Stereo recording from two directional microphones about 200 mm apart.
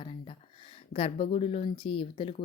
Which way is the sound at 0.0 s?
25° left (ahead or behind).